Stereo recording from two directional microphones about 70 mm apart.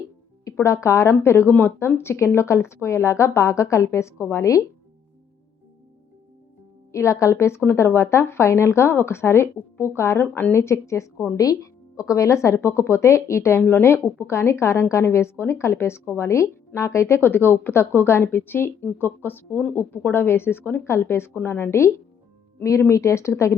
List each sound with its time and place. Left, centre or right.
0.6 s a woman's voice: left
6.9 s a woman's voice: left